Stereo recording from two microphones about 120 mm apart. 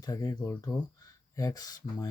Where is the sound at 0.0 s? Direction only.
30° left (ahead or behind).